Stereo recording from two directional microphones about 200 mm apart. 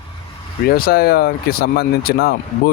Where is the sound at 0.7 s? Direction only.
50° left (ahead or behind).